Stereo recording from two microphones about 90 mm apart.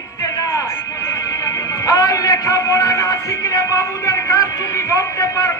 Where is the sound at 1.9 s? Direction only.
40° left (ahead or behind).